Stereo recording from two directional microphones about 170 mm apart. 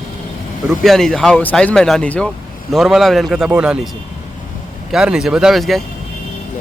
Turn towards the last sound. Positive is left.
turn(degrees=0)  # may be behind; listen again after turning